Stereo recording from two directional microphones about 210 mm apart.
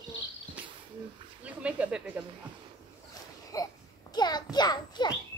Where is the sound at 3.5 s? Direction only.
15° left (ahead or behind).